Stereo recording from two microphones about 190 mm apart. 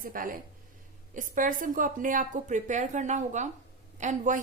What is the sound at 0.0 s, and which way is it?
A woman's voice, 45° right (ahead or behind).